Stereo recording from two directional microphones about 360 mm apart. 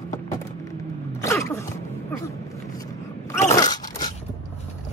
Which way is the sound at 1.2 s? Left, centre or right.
Centre.